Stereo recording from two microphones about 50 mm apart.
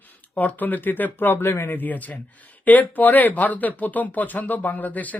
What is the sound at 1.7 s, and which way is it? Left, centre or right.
Speech, left.